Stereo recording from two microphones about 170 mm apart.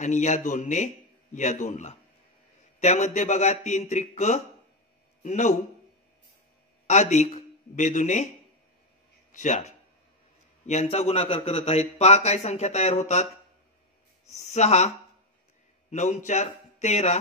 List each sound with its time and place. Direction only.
0.0 s a man's voice: 45° left (ahead or behind)
6.9 s speech: 45° left (ahead or behind)
9.3 s a man's voice: 45° left (ahead or behind)
14.4 s a man's voice: 40° left (ahead or behind)
15.9 s a man's voice: 45° left (ahead or behind)